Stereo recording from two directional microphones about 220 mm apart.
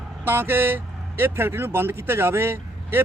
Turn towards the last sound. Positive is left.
turn(degrees=-10)  # may be behind; listen again after turning